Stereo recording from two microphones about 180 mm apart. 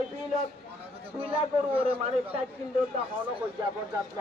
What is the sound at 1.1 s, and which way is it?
A man's voice, 30° right (ahead or behind).